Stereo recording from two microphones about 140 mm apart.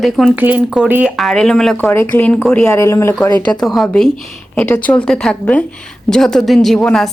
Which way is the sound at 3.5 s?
Centre (ahead or behind).